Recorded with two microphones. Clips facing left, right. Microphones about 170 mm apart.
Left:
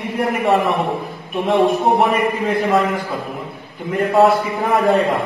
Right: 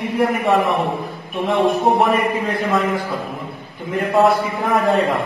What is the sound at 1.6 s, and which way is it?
A man's voice, centre (ahead or behind).